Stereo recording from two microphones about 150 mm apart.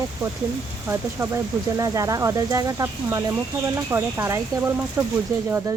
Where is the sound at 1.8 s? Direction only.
20° right (ahead or behind).